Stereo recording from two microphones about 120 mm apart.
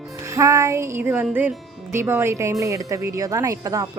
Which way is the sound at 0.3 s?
25° right (ahead or behind).